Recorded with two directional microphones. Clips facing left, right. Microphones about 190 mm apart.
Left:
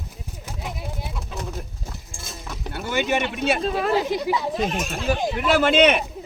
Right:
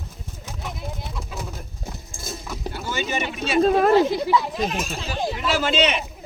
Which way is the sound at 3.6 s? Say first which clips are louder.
Right 6 dB; 45° right (ahead or behind).